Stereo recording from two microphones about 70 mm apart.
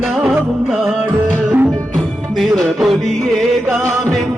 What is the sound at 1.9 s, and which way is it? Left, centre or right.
Music, centre.